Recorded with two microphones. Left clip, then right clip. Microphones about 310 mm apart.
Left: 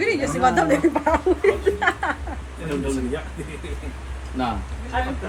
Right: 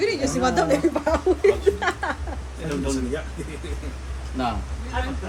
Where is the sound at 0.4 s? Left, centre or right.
Left.